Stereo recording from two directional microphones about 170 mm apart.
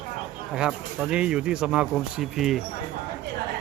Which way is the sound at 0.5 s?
5° right (ahead or behind).